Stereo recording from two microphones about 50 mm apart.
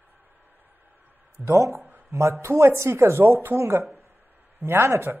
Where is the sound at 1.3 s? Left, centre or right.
Right.